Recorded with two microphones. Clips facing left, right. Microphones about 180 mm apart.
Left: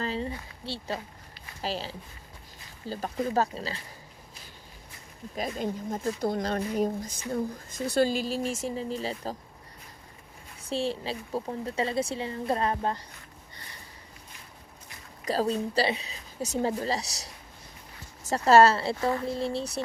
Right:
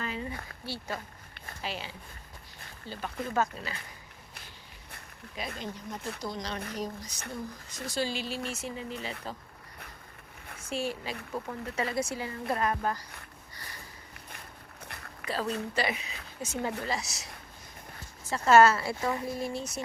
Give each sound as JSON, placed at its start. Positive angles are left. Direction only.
{"t": 0.0, "sound": "a sound", "side_deg": 30}
{"t": 0.6, "sound": "a woman's voice", "side_deg": 25}
{"t": 5.5, "sound": "speech", "side_deg": 50}
{"t": 10.6, "sound": "a woman's voice", "side_deg": 30}
{"t": 15.2, "sound": "a woman's voice", "side_deg": 40}
{"t": 18.3, "sound": "a woman's voice", "side_deg": 35}